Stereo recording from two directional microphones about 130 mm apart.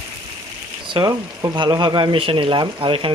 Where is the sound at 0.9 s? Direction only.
30° right (ahead or behind).